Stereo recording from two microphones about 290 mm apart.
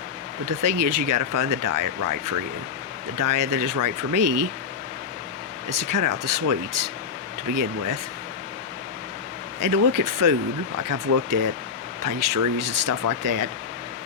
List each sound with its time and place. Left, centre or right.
0.4 s speech: right
3.2 s speech: right
5.6 s speech: right
9.6 s speech: right